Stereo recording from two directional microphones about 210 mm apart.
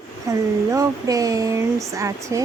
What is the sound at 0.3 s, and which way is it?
Speech, 15° right (ahead or behind).